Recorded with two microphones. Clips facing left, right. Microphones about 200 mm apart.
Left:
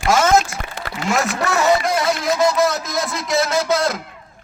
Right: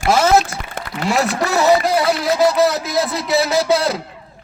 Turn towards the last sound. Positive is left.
turn(degrees=-35)  # may be behind; listen again after turning